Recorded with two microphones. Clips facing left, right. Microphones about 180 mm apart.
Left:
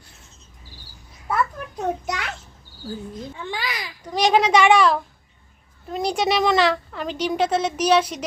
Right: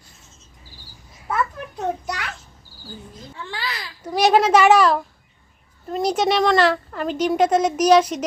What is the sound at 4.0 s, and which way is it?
A woman's voice, 10° right (ahead or behind).